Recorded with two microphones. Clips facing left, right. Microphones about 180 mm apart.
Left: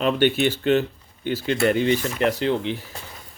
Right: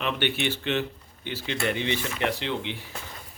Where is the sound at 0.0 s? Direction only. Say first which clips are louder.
Left 8 dB; 40° left (ahead or behind).